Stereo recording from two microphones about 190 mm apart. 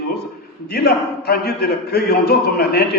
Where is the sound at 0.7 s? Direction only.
55° left (ahead or behind).